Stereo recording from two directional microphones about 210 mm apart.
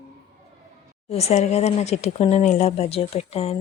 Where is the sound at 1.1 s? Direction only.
30° left (ahead or behind).